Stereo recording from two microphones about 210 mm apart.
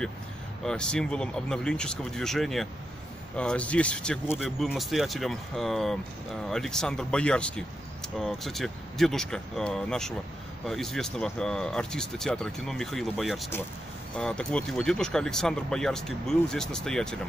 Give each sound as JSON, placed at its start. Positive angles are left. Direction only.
{"t": 0.7, "sound": "speech", "side_deg": 5}